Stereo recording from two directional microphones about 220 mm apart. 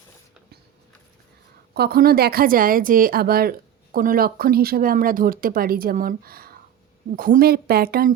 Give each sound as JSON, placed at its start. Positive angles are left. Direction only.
{"t": 1.7, "sound": "speech", "side_deg": -45}